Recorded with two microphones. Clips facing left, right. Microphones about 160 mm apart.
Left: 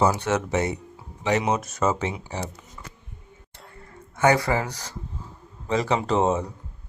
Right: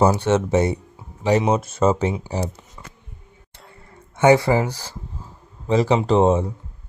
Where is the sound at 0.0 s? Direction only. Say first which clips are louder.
Right 5 dB; 30° right (ahead or behind).